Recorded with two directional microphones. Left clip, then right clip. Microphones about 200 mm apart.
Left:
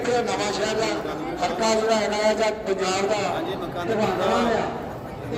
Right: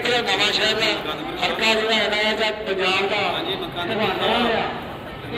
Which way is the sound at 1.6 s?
70° left (ahead or behind).